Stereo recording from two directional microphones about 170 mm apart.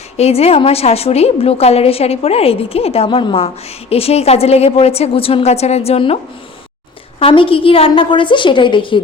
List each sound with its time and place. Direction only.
0.2 s a woman's voice: 35° left (ahead or behind)
7.2 s a woman's voice: 30° left (ahead or behind)